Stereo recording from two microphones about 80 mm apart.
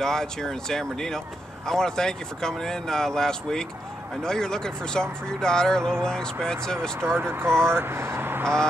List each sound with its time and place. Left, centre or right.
0.0 s speech: centre
7.1 s speech: right